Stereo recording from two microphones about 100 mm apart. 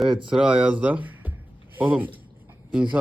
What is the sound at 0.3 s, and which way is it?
Speech, 10° right (ahead or behind).